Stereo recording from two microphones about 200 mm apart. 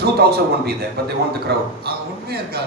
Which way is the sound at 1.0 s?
50° right (ahead or behind).